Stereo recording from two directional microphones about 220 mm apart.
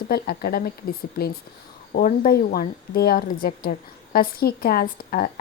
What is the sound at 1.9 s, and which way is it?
A woman's voice, 40° left (ahead or behind).